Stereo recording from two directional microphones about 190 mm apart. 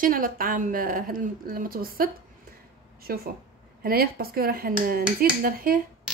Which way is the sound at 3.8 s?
50° right (ahead or behind).